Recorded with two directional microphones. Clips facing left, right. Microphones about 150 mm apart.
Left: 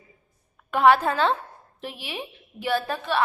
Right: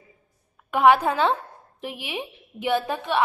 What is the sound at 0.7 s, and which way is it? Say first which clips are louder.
A woman's voice: right 1 dB; 15° right (ahead or behind).